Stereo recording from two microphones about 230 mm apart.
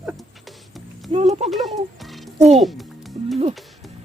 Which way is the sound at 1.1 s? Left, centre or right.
Right.